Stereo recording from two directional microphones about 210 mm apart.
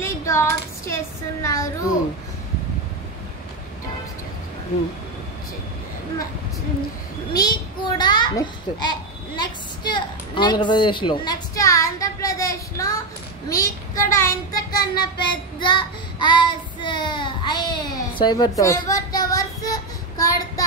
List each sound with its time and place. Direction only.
0.0 s speech: 15° left (ahead or behind)
7.3 s a child's voice: 20° left (ahead or behind)
13.5 s child singing: 15° left (ahead or behind)